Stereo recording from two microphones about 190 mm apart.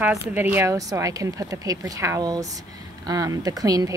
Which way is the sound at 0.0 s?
10° right (ahead or behind).